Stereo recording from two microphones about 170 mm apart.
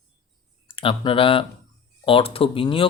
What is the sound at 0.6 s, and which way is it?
Speech, 30° left (ahead or behind).